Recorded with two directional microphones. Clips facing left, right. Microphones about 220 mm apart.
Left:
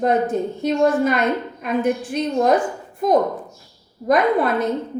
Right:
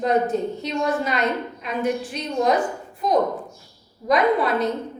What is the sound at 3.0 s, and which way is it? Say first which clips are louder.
A woman's voice: left 3 dB; 50° left (ahead or behind).